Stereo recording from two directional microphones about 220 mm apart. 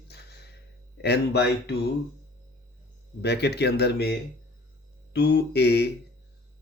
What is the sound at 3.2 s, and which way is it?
Speech, 50° left (ahead or behind).